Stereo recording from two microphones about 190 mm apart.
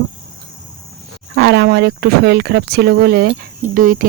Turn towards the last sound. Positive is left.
turn(degrees=-45)  # may be behind; listen again after turning